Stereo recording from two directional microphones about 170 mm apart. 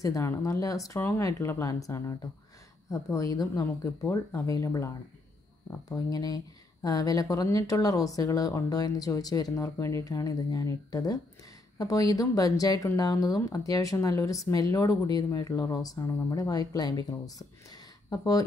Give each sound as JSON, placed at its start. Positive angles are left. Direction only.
{"t": 0.0, "sound": "speech", "side_deg": 15}